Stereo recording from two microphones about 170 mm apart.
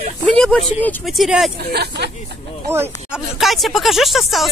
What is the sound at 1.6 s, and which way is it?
Speech, 70° right (ahead or behind).